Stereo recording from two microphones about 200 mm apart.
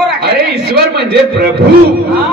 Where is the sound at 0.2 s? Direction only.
55° right (ahead or behind).